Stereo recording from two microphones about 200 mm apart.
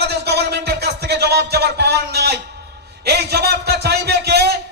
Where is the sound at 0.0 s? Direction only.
55° right (ahead or behind).